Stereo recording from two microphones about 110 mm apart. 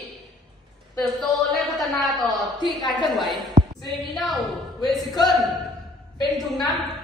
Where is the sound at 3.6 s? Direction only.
90° right.